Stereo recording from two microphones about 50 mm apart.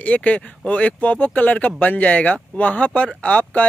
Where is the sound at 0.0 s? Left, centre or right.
Left.